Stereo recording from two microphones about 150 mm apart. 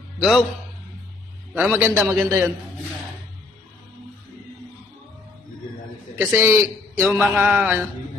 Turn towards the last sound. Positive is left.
turn(degrees=-10)  # may be behind; listen again after turning